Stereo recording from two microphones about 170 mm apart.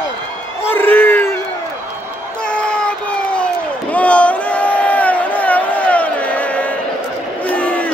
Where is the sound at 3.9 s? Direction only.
10° left (ahead or behind).